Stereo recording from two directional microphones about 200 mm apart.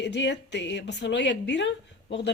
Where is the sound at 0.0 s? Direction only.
60° left (ahead or behind).